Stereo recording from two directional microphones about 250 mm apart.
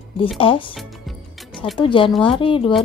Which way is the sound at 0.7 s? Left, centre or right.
Centre.